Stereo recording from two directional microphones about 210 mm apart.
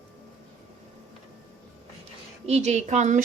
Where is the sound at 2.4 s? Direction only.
30° right (ahead or behind).